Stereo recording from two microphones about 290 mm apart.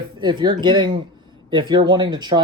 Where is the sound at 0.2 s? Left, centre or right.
Centre.